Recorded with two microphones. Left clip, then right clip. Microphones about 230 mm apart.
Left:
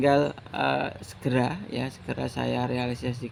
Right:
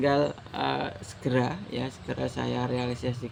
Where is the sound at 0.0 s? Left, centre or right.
Left.